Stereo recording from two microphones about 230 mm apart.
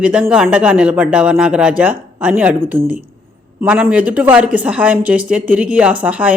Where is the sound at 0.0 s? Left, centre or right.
Centre.